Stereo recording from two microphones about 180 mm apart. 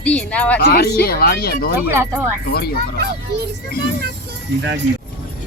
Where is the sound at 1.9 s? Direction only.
10° right (ahead or behind).